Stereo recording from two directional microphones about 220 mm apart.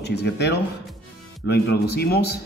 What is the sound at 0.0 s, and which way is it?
A man's voice, 50° left (ahead or behind).